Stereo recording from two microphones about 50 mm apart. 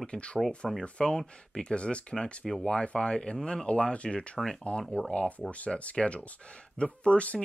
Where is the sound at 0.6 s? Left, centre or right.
Centre.